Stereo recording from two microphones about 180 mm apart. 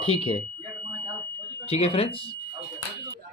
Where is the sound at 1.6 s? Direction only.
35° left (ahead or behind).